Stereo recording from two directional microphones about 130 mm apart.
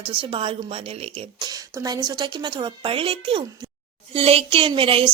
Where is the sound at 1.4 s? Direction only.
30° right (ahead or behind).